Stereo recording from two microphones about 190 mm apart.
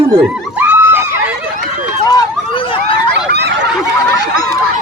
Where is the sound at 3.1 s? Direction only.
60° right (ahead or behind).